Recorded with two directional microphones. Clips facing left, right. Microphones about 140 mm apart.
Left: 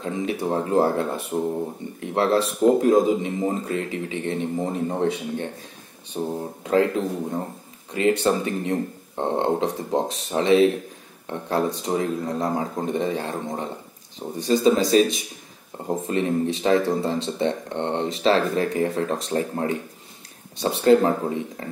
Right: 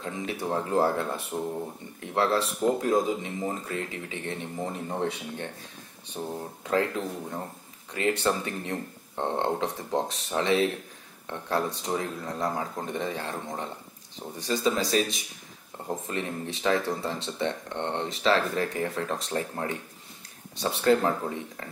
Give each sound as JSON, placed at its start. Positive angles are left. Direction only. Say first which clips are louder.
{"t": 0.0, "sound": "speech", "louder": "left 6 dB", "side_deg": 20}